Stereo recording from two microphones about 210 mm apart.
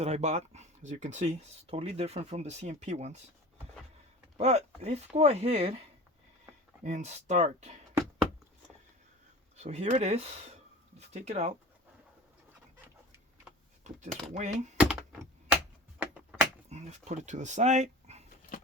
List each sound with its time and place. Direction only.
0.0 s speech: 30° right (ahead or behind)
4.4 s speech: 30° right (ahead or behind)
6.8 s speech: 35° right (ahead or behind)
9.6 s speech: 30° right (ahead or behind)
14.3 s speech: 35° right (ahead or behind)
14.8 s a sound: 5° right (ahead or behind)
16.6 s speech: 30° right (ahead or behind)